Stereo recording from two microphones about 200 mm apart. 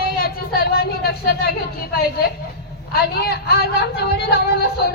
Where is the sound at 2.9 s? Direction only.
50° left (ahead or behind).